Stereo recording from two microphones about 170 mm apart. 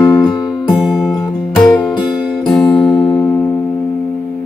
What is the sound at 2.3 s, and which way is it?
Music, 5° left (ahead or behind).